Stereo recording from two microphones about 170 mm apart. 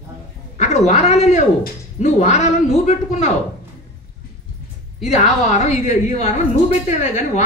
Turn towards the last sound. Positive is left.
turn(degrees=45)  # may be behind; listen again after turning